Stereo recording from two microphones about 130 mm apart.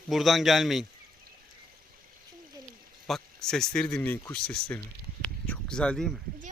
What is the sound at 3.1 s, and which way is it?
Speech, 5° left (ahead or behind).